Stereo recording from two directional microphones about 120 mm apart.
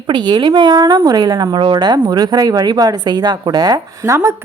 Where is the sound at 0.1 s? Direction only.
40° right (ahead or behind).